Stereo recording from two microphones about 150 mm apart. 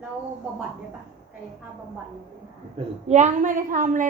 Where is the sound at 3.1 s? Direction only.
55° right (ahead or behind).